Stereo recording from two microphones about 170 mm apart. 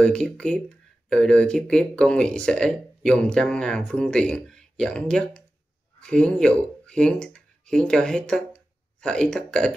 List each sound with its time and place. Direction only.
0.0 s speech: 5° left (ahead or behind)